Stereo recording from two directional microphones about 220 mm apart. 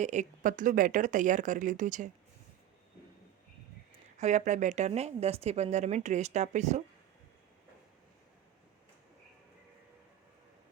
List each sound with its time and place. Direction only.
0.0 s a woman's voice: 30° right (ahead or behind)
4.2 s a woman's voice: 30° right (ahead or behind)